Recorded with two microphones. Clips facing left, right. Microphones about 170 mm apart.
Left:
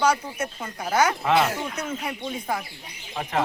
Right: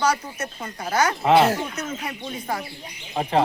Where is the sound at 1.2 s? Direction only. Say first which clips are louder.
Right 9 dB; 30° right (ahead or behind).